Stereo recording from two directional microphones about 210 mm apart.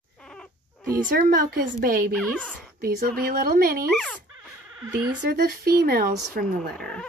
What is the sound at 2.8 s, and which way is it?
Speech, 45° right (ahead or behind).